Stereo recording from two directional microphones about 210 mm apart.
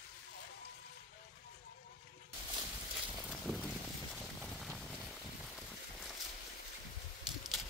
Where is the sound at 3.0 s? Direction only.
Centre (ahead or behind).